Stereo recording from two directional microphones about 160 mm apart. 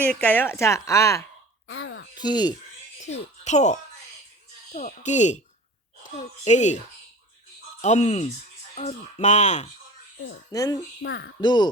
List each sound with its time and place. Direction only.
0.0 s a woman's voice: 10° left (ahead or behind); by 2.6 s 25° left (ahead or behind)
3.1 s speech: 45° left (ahead or behind)
10.5 s speech: 20° left (ahead or behind)